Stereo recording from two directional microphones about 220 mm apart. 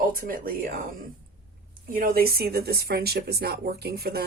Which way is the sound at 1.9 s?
40° right (ahead or behind).